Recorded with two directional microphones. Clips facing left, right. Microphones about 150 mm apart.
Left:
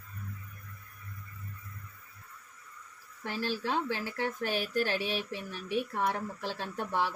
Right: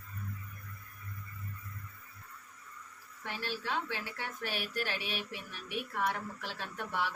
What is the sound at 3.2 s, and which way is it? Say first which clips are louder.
Speech: left 5 dB; 40° left (ahead or behind).